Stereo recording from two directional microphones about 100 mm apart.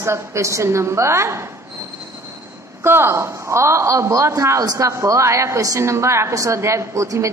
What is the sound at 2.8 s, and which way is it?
A woman's voice, 25° right (ahead or behind).